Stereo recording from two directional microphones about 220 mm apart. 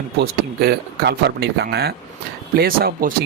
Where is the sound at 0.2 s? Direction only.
45° right (ahead or behind).